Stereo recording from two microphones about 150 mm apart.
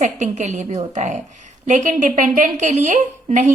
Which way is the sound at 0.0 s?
55° right (ahead or behind).